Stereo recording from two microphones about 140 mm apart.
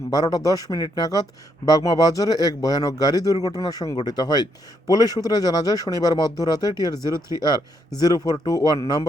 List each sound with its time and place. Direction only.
0.1 s speech: 25° left (ahead or behind)